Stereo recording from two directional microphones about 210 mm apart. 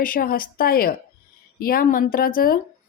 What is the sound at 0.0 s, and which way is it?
Speech, 45° left (ahead or behind).